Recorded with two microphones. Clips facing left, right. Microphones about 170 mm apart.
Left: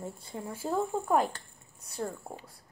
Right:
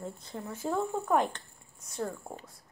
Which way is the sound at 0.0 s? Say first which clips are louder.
Left 1 dB; 10° left (ahead or behind).